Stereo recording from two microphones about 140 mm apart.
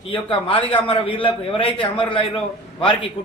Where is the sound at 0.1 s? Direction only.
40° left (ahead or behind).